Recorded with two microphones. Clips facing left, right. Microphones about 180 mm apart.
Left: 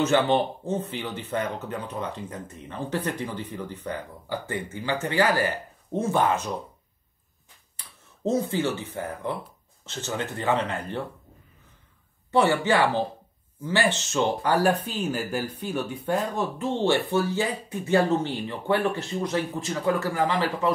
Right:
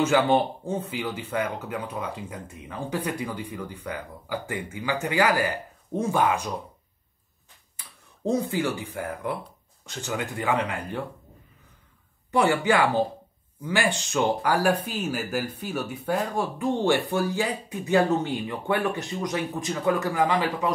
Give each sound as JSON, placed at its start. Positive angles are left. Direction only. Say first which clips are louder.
{"t": 0.0, "sound": "speech", "louder": "right 1 dB", "side_deg": -10}
{"t": 8.3, "sound": "speech", "louder": "even", "side_deg": -15}
{"t": 13.7, "sound": "speech", "louder": "left 1 dB", "side_deg": -15}